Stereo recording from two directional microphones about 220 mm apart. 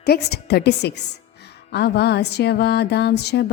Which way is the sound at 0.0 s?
45° left (ahead or behind).